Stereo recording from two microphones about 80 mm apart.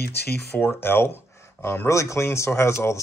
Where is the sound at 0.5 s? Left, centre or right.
Left.